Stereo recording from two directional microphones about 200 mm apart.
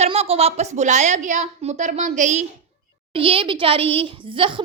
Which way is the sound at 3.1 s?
25° right (ahead or behind).